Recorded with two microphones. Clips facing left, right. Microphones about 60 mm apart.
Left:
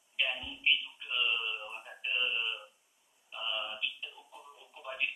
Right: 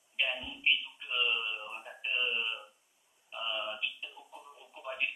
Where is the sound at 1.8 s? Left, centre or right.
Centre.